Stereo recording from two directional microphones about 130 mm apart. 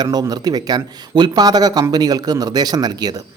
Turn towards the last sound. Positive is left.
turn(degrees=-30)  # may be behind; listen again after turning